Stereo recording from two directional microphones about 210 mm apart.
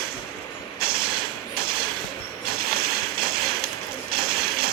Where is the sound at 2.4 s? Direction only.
45° right (ahead or behind).